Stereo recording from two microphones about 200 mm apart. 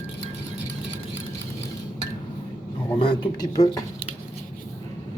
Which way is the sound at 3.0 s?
20° left (ahead or behind).